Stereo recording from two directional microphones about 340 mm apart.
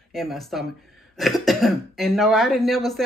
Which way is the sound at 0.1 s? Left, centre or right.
Centre.